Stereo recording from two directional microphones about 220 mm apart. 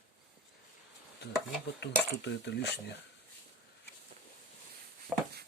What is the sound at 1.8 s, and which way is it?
Speech, 50° left (ahead or behind).